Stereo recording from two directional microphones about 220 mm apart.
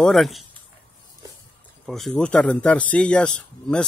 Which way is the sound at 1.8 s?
Centre (ahead or behind).